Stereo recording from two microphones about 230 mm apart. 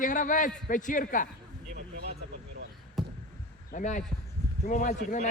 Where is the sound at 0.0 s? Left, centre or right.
Left.